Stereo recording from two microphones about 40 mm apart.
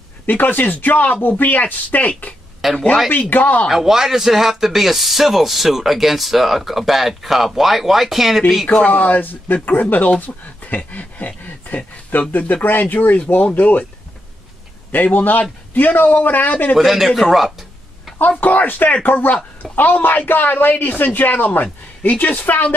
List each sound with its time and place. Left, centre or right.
0.3 s speech: left
2.6 s speech: centre
3.1 s speech: left
3.7 s speech: centre
8.7 s speech: left
14.9 s speech: left
16.7 s a man's voice: centre
17.1 s speech: centre
17.4 s a sound: centre
18.4 s a woman's voice: left